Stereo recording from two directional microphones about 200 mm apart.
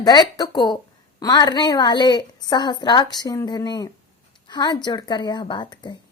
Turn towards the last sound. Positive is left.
turn(degrees=20)  # may be behind; listen again after turning